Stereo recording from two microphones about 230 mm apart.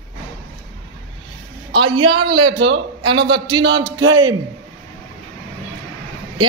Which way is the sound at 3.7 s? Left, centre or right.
Centre.